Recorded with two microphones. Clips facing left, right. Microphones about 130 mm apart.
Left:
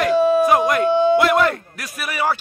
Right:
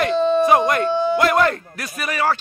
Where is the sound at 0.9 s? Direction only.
20° left (ahead or behind).